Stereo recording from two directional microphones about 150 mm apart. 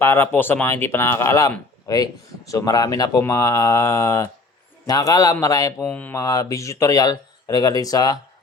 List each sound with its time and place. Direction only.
0.0 s speech: 15° left (ahead or behind)
5.8 s speech: 10° left (ahead or behind)
6.1 s speech: 25° left (ahead or behind)